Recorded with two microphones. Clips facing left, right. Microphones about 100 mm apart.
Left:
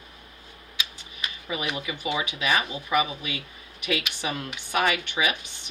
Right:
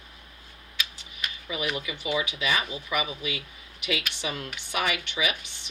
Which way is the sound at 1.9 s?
55° left (ahead or behind).